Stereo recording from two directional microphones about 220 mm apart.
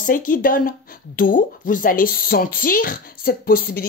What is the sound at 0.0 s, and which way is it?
Speech, 40° left (ahead or behind).